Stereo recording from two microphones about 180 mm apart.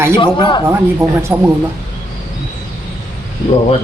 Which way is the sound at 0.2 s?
25° left (ahead or behind).